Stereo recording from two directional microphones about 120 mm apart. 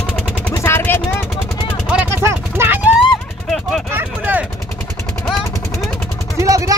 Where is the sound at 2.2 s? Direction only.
20° right (ahead or behind).